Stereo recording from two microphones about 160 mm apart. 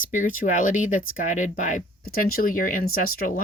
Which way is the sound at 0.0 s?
55° left (ahead or behind).